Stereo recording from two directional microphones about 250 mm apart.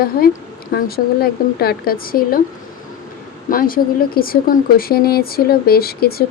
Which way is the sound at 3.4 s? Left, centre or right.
Left.